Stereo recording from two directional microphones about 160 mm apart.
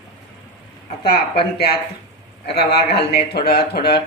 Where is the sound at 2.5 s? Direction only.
90° left.